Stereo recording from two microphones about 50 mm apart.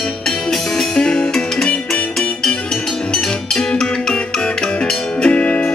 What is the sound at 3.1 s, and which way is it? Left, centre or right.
Music, centre.